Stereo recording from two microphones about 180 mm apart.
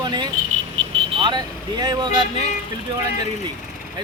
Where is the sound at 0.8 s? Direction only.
35° right (ahead or behind).